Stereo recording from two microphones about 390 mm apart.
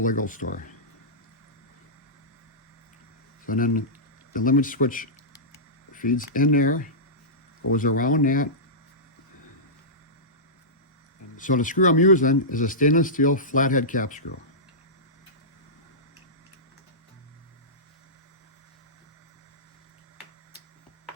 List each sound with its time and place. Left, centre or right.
0.0 s speech: centre
3.4 s speech: left
11.3 s speech: centre